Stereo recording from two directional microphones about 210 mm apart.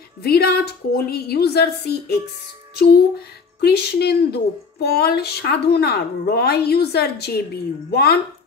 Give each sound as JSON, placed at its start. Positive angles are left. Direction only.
{"t": 0.2, "sound": "speech", "side_deg": 50}